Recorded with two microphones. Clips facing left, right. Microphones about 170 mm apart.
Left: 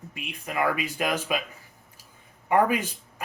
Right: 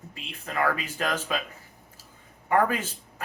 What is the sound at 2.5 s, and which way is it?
Speech, 15° left (ahead or behind).